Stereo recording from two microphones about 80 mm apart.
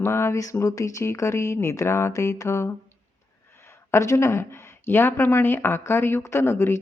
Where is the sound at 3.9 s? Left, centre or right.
Left.